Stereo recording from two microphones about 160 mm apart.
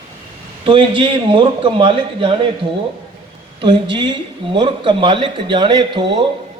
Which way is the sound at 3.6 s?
30° right (ahead or behind).